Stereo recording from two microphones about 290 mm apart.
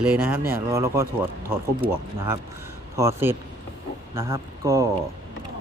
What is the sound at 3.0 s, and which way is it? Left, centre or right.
Speech, centre.